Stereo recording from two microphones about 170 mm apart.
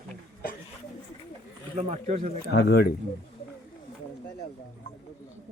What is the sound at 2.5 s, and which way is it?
Speech, 70° left (ahead or behind).